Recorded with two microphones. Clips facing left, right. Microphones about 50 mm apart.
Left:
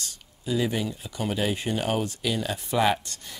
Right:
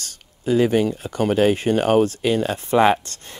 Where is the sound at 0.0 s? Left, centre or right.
Right.